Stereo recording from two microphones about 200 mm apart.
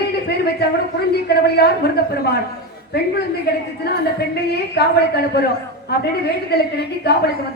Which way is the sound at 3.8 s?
55° left (ahead or behind).